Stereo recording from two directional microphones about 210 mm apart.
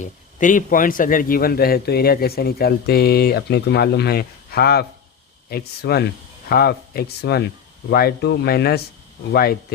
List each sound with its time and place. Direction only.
0.0 s a man's voice: 35° left (ahead or behind)